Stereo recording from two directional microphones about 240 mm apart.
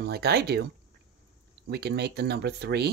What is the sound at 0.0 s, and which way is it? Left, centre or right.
Speech, right.